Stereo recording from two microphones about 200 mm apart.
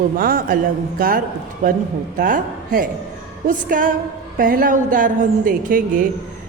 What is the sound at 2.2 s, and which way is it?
A woman's voice, 40° right (ahead or behind).